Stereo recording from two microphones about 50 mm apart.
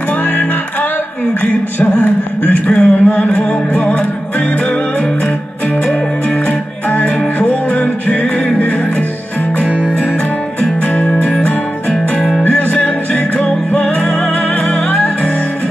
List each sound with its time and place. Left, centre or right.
1.4 s a man's voice: left
2.7 s music: left
6.9 s music: left
10.6 s music: left
11.9 s music: centre
12.4 s music: left